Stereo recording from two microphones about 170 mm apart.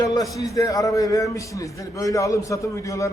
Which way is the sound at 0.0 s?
20° left (ahead or behind).